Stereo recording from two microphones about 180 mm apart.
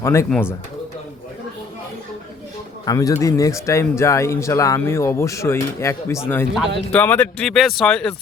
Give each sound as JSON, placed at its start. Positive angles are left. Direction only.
{"t": 0.0, "sound": "speech", "side_deg": 15}
{"t": 2.8, "sound": "speech", "side_deg": 20}